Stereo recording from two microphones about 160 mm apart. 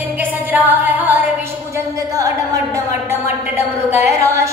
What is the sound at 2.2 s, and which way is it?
A woman's voice, 20° right (ahead or behind).